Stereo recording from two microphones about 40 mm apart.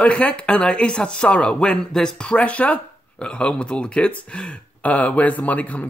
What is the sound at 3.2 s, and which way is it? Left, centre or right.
Speech, left.